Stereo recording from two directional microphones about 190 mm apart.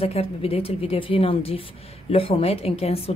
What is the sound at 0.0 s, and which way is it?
Speech, 30° left (ahead or behind).